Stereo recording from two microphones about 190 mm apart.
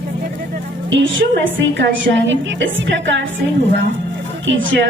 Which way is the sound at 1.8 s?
70° right (ahead or behind).